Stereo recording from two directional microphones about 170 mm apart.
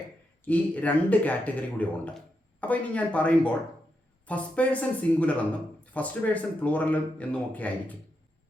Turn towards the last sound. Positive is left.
turn(degrees=10)  # may be behind; listen again after turning